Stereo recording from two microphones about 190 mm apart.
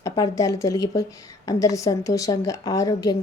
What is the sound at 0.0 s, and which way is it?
A woman's voice, 20° left (ahead or behind).